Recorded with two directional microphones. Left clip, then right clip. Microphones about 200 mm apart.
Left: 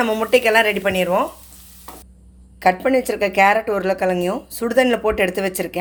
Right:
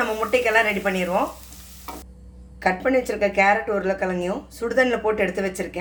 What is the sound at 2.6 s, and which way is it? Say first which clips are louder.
A woman's voice: left 4 dB; 40° left (ahead or behind).